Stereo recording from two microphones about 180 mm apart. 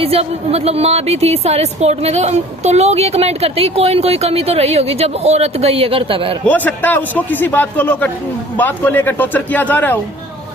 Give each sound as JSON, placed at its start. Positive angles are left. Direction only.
{"t": 0.0, "sound": "a woman's voice", "side_deg": -35}
{"t": 6.4, "sound": "a man's voice", "side_deg": 10}